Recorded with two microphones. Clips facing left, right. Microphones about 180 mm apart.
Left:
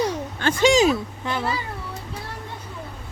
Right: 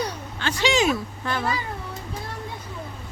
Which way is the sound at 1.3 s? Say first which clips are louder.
Even; 10° left (ahead or behind).